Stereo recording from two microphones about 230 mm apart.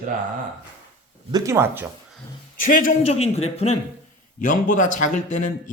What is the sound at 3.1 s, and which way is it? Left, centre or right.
A man's voice, left.